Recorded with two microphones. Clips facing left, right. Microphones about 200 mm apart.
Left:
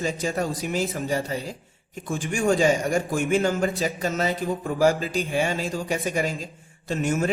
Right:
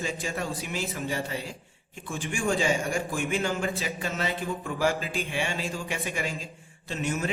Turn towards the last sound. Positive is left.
turn(degrees=45)  # may be behind; listen again after turning